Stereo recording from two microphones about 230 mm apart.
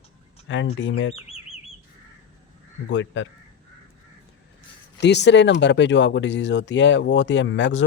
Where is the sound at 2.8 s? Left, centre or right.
Left.